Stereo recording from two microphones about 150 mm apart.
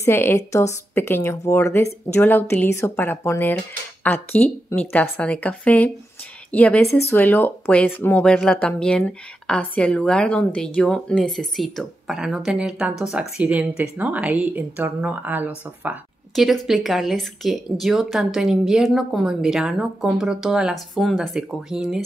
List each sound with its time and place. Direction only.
0.0 s speech: 15° left (ahead or behind); by 16.0 s 10° right (ahead or behind)
16.3 s speech: centre (ahead or behind)